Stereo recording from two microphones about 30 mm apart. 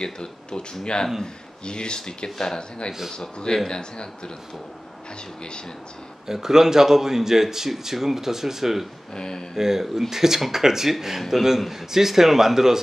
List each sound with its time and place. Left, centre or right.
0.0 s speech: left
3.6 s speech: left
6.2 s a man's voice: centre
9.1 s speech: left
9.6 s a man's voice: centre